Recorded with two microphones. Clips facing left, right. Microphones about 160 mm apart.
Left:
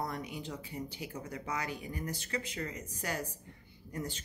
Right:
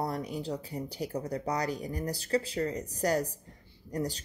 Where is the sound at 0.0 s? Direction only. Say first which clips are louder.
Right 5 dB; 35° right (ahead or behind).